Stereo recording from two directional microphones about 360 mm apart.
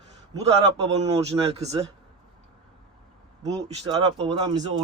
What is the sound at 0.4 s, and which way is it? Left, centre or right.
Speech, centre.